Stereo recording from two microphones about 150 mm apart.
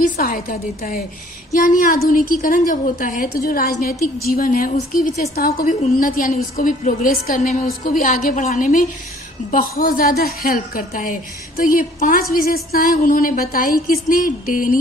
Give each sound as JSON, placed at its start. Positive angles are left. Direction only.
{"t": 0.0, "sound": "a woman's voice", "side_deg": 70}
{"t": 1.6, "sound": "a woman's voice", "side_deg": 60}
{"t": 5.8, "sound": "a woman's voice", "side_deg": 65}